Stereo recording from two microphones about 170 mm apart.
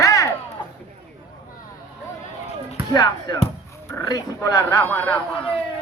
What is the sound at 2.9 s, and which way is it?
Speech, 25° left (ahead or behind).